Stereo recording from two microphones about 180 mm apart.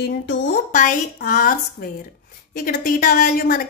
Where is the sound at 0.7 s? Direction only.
50° left (ahead or behind).